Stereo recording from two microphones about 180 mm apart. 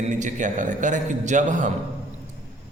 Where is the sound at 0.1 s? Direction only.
45° right (ahead or behind).